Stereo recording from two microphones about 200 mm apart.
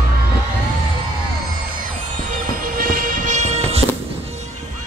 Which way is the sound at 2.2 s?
40° right (ahead or behind).